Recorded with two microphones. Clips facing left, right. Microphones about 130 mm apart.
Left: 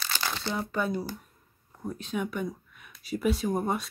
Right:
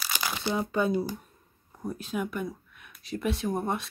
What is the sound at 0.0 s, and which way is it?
Crumpling, 10° right (ahead or behind).